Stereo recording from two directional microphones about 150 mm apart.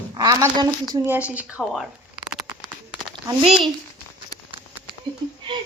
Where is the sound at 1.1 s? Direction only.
10° right (ahead or behind).